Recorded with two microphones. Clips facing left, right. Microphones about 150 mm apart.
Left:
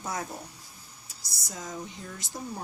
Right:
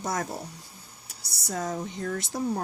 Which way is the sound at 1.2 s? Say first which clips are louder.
Right 9 dB; 65° right (ahead or behind).